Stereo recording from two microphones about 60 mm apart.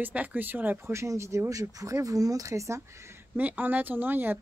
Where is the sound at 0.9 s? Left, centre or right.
Right.